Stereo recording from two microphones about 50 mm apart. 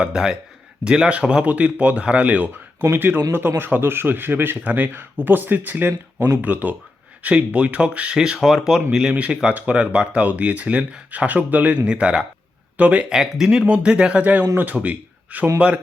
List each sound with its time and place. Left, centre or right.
0.0 s speech: centre
2.9 s speech: right; by 8.4 s centre
8.4 s speech: centre
9.1 s speech: right
12.7 s speech: right
13.1 s speech: centre
13.7 s speech: right